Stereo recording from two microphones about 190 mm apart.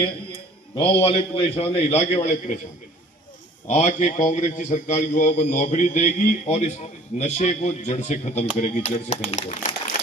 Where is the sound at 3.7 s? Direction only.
40° left (ahead or behind).